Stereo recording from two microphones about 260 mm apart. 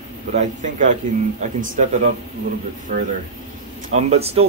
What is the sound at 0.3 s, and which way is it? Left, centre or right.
Speech, right.